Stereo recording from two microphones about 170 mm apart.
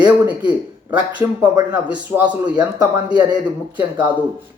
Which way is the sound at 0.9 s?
10° right (ahead or behind).